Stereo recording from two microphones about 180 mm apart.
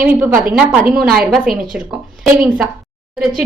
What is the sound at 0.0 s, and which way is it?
A woman's voice, 10° right (ahead or behind).